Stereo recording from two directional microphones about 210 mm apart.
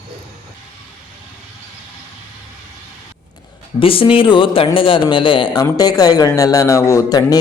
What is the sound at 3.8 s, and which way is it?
Speech, 25° left (ahead or behind).